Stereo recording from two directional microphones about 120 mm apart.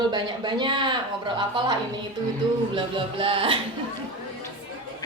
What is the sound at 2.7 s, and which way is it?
Music, 45° right (ahead or behind).